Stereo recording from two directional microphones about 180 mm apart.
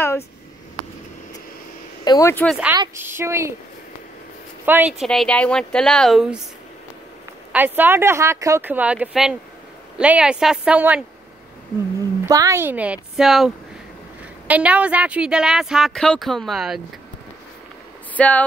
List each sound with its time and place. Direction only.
2.0 s speech: 15° left (ahead or behind)
2.4 s speech: centre (ahead or behind)
3.0 s speech: 15° right (ahead or behind)
4.6 s speech: 10° right (ahead or behind)
7.5 s speech: 10° right (ahead or behind)
12.3 s speech: 15° right (ahead or behind); by 13.5 s centre (ahead or behind)
14.5 s speech: 5° right (ahead or behind)
18.1 s speech: 10° left (ahead or behind)